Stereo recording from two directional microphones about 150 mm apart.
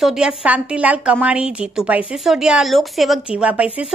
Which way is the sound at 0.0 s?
5° right (ahead or behind).